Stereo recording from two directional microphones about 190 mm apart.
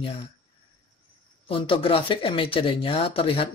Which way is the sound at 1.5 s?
25° left (ahead or behind).